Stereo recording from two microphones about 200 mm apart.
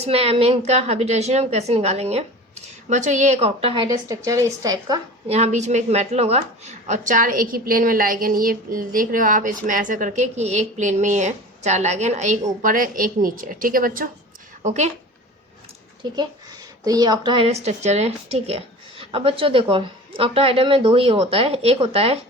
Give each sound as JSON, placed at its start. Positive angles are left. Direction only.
{"t": 0.0, "sound": "a woman's voice", "side_deg": -30}
{"t": 3.8, "sound": "a woman's voice", "side_deg": -15}
{"t": 5.3, "sound": "a woman's voice", "side_deg": -35}
{"t": 16.8, "sound": "a woman's voice", "side_deg": -20}